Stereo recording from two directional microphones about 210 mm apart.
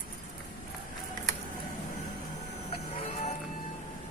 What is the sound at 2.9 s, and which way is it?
Music, 30° left (ahead or behind).